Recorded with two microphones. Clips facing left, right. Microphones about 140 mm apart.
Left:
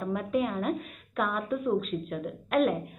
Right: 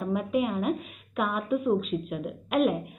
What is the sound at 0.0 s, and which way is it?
Speech, 10° right (ahead or behind).